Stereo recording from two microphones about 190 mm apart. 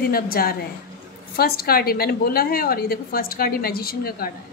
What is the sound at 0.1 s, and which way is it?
A woman's voice, 50° left (ahead or behind).